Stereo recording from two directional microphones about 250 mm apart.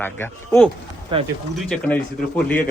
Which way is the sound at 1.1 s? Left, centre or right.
Right.